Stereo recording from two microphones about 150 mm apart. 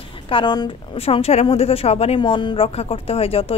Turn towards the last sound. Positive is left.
turn(degrees=40)  # may be behind; listen again after turning